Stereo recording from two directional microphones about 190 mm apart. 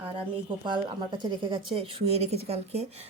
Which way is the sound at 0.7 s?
25° right (ahead or behind).